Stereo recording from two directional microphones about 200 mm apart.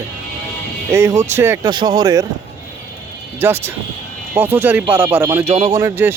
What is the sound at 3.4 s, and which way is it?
Speech, 10° right (ahead or behind).